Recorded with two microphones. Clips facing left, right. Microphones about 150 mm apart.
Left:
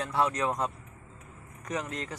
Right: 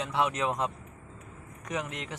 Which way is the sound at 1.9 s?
90° right.